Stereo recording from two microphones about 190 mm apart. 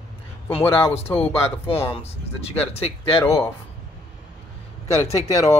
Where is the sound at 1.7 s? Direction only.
30° left (ahead or behind).